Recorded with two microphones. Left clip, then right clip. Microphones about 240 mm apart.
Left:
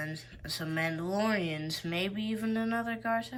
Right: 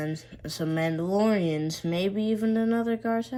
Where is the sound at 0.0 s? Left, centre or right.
Centre.